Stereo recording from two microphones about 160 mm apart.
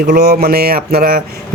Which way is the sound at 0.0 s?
80° right.